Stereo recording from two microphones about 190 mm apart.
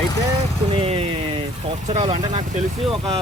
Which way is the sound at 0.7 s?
30° right (ahead or behind).